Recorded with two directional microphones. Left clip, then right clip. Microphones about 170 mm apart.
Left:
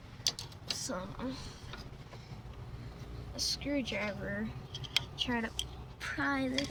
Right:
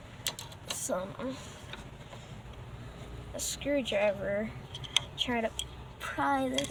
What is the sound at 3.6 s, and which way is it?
Speech, 15° left (ahead or behind).